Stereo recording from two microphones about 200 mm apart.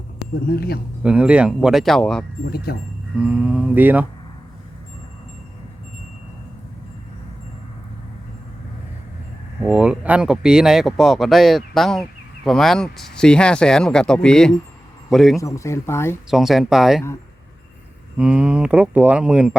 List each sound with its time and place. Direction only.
0.4 s speech: 50° left (ahead or behind)
1.0 s speech: 5° right (ahead or behind)
2.7 s speech: 50° left (ahead or behind)
3.2 s speech: 5° right (ahead or behind)
9.6 s speech: 5° right (ahead or behind)
15.4 s speech: 15° left (ahead or behind)
16.3 s speech: centre (ahead or behind)
18.2 s speech: 5° right (ahead or behind)